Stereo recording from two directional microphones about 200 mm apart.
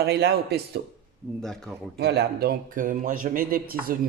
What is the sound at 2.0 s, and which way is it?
A man's voice, 55° right (ahead or behind).